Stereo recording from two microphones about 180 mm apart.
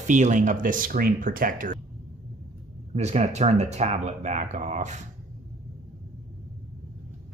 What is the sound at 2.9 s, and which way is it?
A man's voice, 35° right (ahead or behind).